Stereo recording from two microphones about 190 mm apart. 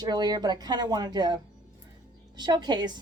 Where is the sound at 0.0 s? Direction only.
20° right (ahead or behind).